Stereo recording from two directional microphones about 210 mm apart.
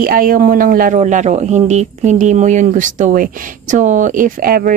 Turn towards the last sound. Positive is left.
turn(degrees=-40)  # may be behind; listen again after turning